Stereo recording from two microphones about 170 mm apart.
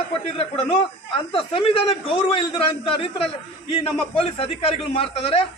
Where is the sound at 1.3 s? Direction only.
35° left (ahead or behind).